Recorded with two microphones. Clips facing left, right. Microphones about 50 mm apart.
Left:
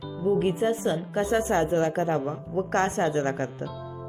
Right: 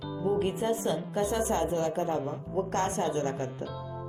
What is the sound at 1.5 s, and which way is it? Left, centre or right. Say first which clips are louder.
Speech: left 5 dB; left.